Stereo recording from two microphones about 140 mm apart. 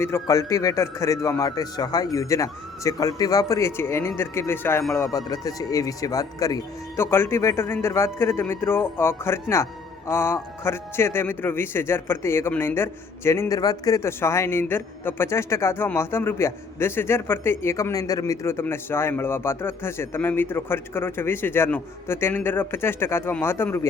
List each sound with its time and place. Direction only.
0.0 s speech: 20° left (ahead or behind)